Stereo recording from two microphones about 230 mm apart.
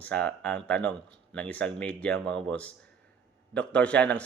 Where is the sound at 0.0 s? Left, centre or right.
Centre.